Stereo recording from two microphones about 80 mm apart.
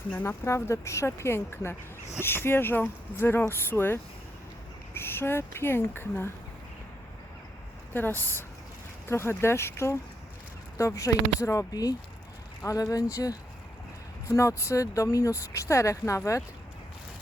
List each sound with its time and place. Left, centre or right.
0.1 s speech: left
0.4 s speech: left
7.9 s speech: left